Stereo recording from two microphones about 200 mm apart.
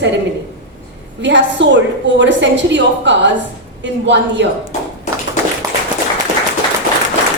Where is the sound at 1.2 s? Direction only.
60° right (ahead or behind).